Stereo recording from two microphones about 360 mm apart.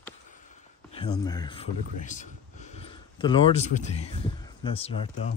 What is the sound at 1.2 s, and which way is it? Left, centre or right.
Speech, centre.